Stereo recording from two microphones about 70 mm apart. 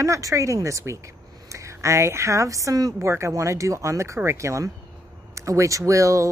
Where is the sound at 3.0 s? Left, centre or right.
Right.